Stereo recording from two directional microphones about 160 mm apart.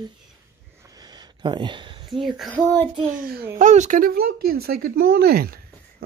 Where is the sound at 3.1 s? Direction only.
70° right (ahead or behind).